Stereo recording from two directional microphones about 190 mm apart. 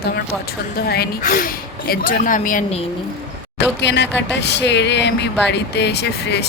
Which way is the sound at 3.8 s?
65° left (ahead or behind).